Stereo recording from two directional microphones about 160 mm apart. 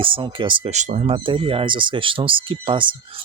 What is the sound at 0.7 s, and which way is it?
Speech, 45° right (ahead or behind).